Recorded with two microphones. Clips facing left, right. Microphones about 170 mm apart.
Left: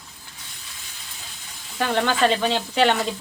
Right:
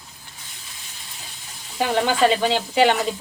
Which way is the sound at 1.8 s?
10° right (ahead or behind).